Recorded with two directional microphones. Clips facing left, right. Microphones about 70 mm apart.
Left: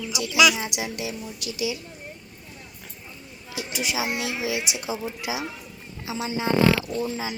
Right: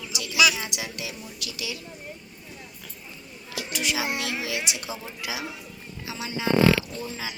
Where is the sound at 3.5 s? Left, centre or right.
Centre.